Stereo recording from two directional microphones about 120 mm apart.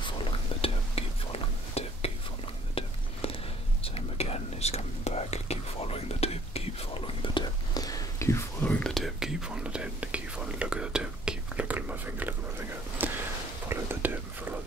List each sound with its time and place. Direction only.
0.0 s whispering: 50° left (ahead or behind); by 8.6 s 25° left (ahead or behind)
8.6 s whispering: 10° left (ahead or behind)
8.9 s whispering: centre (ahead or behind)